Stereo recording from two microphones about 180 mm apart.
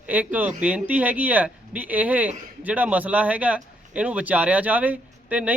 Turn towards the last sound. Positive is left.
turn(degrees=-10)  # may be behind; listen again after turning